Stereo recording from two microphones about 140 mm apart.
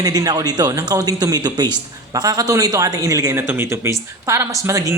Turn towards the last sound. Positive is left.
turn(degrees=-20)  # may be behind; listen again after turning